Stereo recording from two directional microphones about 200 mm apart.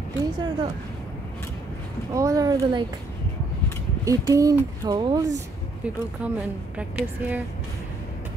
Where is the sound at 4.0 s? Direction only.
15° right (ahead or behind).